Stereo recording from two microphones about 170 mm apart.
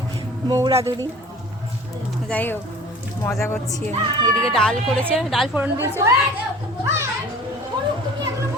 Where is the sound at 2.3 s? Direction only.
10° left (ahead or behind).